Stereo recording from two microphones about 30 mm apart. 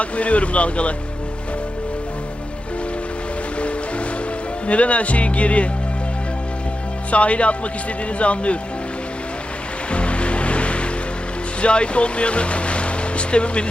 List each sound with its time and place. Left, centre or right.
0.0 s speech: left
4.6 s speech: left
7.1 s speech: left
9.9 s music: left
11.6 s speech: left